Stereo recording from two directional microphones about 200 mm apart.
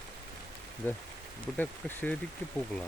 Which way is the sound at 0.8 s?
10° left (ahead or behind).